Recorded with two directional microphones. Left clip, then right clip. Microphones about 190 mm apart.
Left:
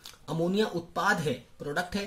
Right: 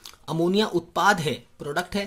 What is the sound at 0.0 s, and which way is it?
Speech, 35° right (ahead or behind).